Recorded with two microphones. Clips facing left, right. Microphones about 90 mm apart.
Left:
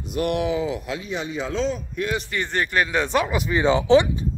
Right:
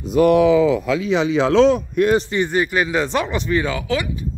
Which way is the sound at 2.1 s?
25° right (ahead or behind).